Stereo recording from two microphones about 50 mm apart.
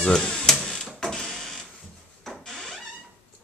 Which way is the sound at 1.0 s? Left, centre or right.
Centre.